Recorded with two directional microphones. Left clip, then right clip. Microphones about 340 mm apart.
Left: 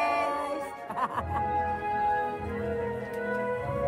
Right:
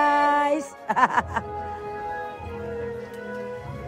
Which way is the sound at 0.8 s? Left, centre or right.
Right.